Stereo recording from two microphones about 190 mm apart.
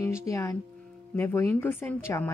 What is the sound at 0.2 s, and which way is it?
Speech, 15° left (ahead or behind).